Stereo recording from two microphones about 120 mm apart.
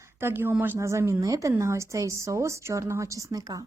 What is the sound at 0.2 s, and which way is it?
Speech, 20° right (ahead or behind).